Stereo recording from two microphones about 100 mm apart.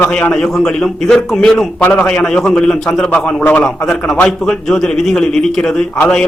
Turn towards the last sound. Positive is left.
turn(degrees=10)  # may be behind; listen again after turning